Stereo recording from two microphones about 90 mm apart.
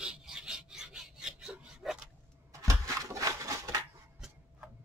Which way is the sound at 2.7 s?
35° right (ahead or behind).